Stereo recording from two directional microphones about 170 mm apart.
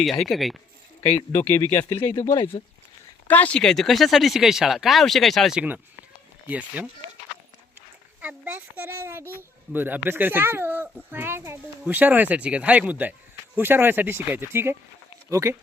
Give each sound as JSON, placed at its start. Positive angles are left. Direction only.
{"t": 0.0, "sound": "speech", "side_deg": 0}
{"t": 1.0, "sound": "speech", "side_deg": 10}
{"t": 3.2, "sound": "a child's voice", "side_deg": 10}
{"t": 8.2, "sound": "a child's voice", "side_deg": -10}